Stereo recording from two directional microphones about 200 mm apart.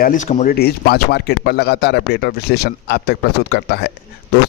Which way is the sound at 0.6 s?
50° left (ahead or behind).